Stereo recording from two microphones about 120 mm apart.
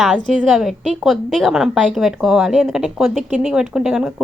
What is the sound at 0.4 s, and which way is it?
A woman's voice, centre (ahead or behind).